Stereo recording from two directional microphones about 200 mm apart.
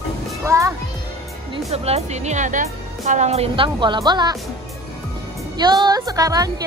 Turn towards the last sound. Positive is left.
turn(degrees=-20)  # may be behind; listen again after turning